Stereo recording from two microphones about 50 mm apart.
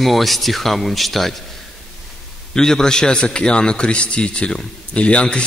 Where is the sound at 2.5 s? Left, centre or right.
Centre.